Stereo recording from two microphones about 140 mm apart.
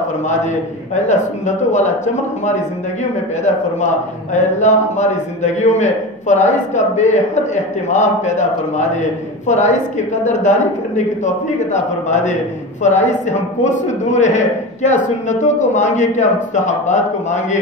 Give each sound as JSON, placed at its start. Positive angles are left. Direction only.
{"t": 1.0, "sound": "a man's voice", "side_deg": 60}